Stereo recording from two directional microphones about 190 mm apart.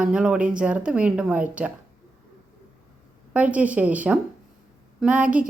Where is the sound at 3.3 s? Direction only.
10° right (ahead or behind).